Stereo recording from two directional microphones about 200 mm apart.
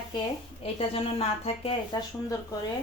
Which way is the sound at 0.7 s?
30° left (ahead or behind).